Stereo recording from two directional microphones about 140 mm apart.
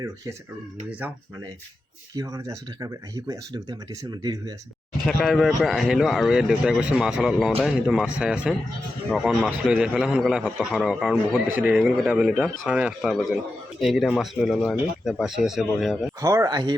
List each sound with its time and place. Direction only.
0.9 s speech: 10° right (ahead or behind)
2.1 s speech: 20° right (ahead or behind)
5.0 s speech: centre (ahead or behind)
11.5 s speech: 10° right (ahead or behind)
16.2 s speech: 25° right (ahead or behind)